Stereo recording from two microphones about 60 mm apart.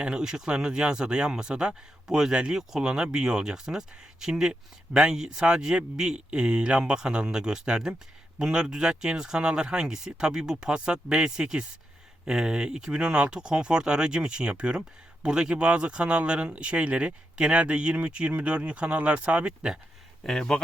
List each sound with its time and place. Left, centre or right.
0.0 s speech: centre
20.2 s speech: centre